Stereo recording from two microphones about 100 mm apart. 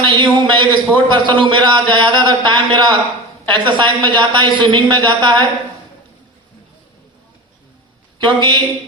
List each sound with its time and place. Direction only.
0.0 s a woman's voice: 50° right (ahead or behind)
8.2 s a woman's voice: 50° right (ahead or behind)